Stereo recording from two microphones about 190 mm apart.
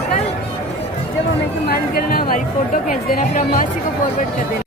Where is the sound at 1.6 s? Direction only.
55° left (ahead or behind).